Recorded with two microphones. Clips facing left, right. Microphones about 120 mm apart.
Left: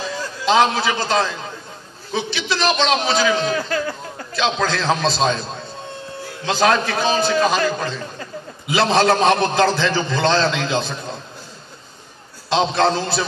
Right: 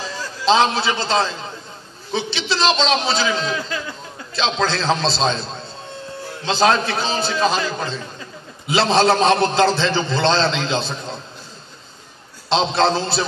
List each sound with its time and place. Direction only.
0.5 s a man's voice: 25° right (ahead or behind)
3.3 s speech: 55° left (ahead or behind)
4.6 s a man's voice: 25° right (ahead or behind)
6.4 s a man's voice: 25° right (ahead or behind)
12.4 s a man's voice: 25° right (ahead or behind)